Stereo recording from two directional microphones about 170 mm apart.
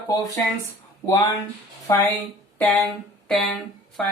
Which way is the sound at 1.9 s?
15° left (ahead or behind).